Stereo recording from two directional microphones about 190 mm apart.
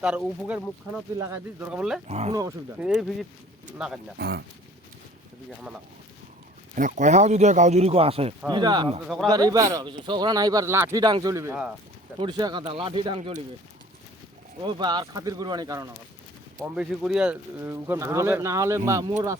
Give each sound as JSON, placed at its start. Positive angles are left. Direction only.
{"t": 0.0, "sound": "speech", "side_deg": -5}
{"t": 2.0, "sound": "speech", "side_deg": -35}
{"t": 2.7, "sound": "speech", "side_deg": -5}
{"t": 4.2, "sound": "speech", "side_deg": -60}
{"t": 6.7, "sound": "speech", "side_deg": -40}
{"t": 9.0, "sound": "speech", "side_deg": 0}
{"t": 9.3, "sound": "speech", "side_deg": -20}
{"t": 14.6, "sound": "speech", "side_deg": -25}
{"t": 16.6, "sound": "speech", "side_deg": -5}